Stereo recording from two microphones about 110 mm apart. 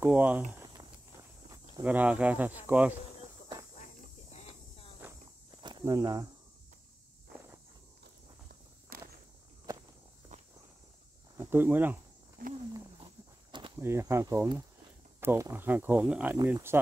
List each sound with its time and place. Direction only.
0.0 s cricket: 15° right (ahead or behind)
1.8 s cricket: 15° right (ahead or behind)
3.7 s cricket: 90° left
5.6 s walk: 45° right (ahead or behind)
5.9 s speech: 35° right (ahead or behind)
11.3 s speech: 20° right (ahead or behind)
13.0 s a sound: 50° right (ahead or behind)
13.7 s speech: 25° right (ahead or behind)